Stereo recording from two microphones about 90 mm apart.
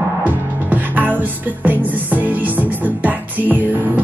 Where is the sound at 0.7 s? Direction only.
20° right (ahead or behind).